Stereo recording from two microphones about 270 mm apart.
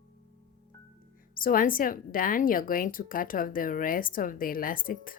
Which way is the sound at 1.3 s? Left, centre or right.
Left.